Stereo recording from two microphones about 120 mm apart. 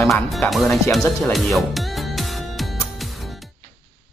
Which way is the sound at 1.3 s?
Centre (ahead or behind).